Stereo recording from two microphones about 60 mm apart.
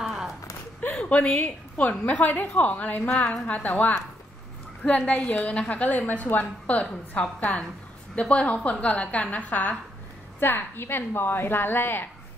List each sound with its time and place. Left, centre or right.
0.0 s a sound: centre
0.9 s a woman's voice: left
10.4 s a woman's voice: left